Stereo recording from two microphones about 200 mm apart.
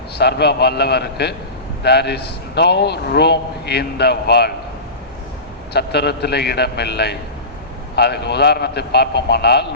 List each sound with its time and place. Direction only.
0.2 s a man's voice: 55° left (ahead or behind)
5.7 s a man's voice: 55° left (ahead or behind)